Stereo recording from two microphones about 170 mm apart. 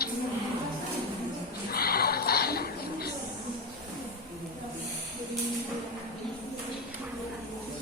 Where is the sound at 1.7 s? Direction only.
65° left (ahead or behind).